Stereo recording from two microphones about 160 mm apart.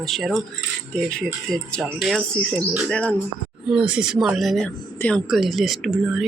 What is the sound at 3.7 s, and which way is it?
Speech, 5° right (ahead or behind).